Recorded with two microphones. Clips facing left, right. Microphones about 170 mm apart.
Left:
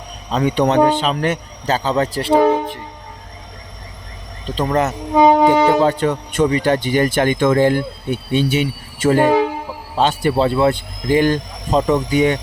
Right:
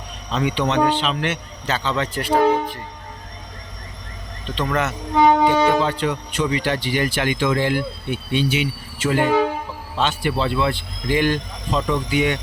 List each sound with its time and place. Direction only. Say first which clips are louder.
0.3 s speech: left 5 dB; 40° left (ahead or behind); by 2.8 s 25° left (ahead or behind)
4.4 s speech: left 5 dB; 40° left (ahead or behind)
5.1 s wind instrument: left 4 dB; 15° left (ahead or behind)
5.8 s speech: left 6 dB; 45° left (ahead or behind)